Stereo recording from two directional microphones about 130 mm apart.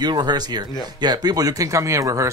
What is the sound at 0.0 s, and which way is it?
Speech, 35° right (ahead or behind).